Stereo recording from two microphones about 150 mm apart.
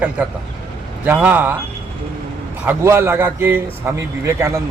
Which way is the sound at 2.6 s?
15° right (ahead or behind).